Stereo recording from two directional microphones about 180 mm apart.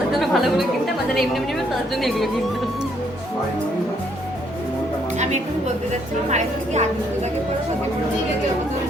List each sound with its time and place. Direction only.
0.1 s chatter: centre (ahead or behind)
1.1 s a woman's voice: centre (ahead or behind)
5.2 s a woman's voice: 40° right (ahead or behind)